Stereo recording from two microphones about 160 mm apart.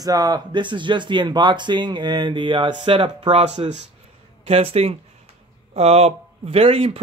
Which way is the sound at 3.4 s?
45° right (ahead or behind).